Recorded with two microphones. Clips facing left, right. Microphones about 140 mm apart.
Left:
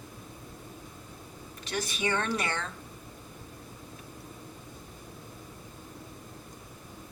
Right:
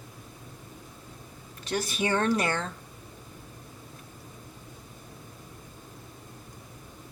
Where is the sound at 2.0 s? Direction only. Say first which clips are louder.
Right 5 dB; 40° right (ahead or behind).